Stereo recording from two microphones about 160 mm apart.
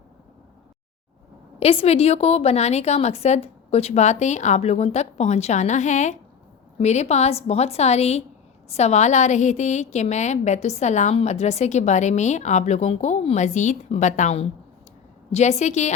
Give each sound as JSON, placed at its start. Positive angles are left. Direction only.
{"t": 1.5, "sound": "a woman's voice", "side_deg": 40}